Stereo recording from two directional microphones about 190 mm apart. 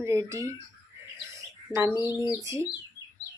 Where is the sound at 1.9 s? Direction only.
20° left (ahead or behind).